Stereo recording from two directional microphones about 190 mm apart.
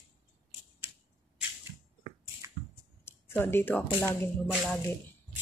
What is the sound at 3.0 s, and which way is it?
Speech, 10° left (ahead or behind).